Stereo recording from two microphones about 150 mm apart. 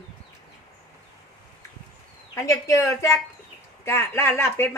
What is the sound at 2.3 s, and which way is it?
Speech, 20° left (ahead or behind).